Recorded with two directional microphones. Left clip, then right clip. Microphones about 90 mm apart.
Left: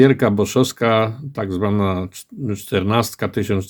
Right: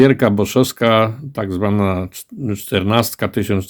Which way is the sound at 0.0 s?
30° right (ahead or behind).